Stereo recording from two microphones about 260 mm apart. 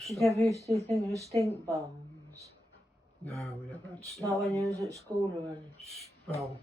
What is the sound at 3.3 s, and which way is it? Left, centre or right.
Speech, centre.